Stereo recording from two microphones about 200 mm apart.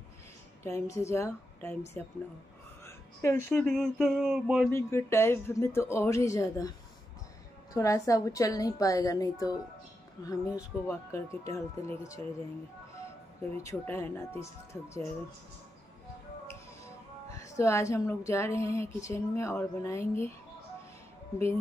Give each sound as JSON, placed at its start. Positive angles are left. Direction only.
{"t": 0.8, "sound": "speech", "side_deg": 15}
{"t": 3.2, "sound": "speech", "side_deg": 10}
{"t": 4.6, "sound": "speech", "side_deg": 10}
{"t": 7.7, "sound": "speech", "side_deg": 15}
{"t": 13.6, "sound": "speech", "side_deg": 15}
{"t": 17.4, "sound": "speech", "side_deg": 15}